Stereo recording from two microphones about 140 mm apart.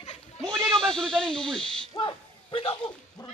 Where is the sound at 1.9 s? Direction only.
30° left (ahead or behind).